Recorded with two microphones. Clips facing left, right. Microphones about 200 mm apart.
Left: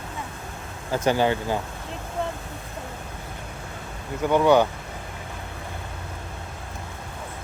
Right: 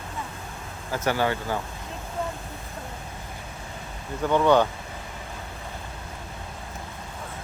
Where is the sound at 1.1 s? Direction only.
20° left (ahead or behind).